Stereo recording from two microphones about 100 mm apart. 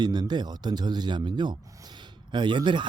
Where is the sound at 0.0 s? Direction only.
45° right (ahead or behind).